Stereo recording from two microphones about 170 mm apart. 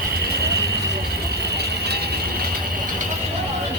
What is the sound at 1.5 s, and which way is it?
Vehicle, 75° right (ahead or behind).